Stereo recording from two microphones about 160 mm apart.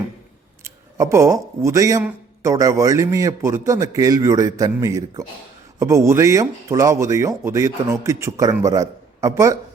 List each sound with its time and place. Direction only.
0.6 s a man's voice: 20° right (ahead or behind)